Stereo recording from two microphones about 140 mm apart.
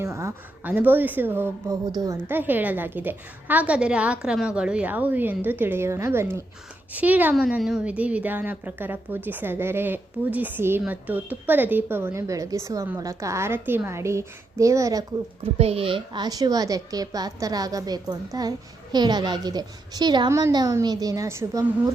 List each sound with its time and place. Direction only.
0.0 s a child's voice: 20° right (ahead or behind)
15.5 s a child's voice: 45° right (ahead or behind); by 21.6 s 20° right (ahead or behind)